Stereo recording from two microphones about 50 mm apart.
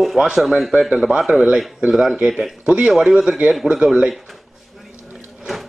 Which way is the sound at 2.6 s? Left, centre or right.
Right.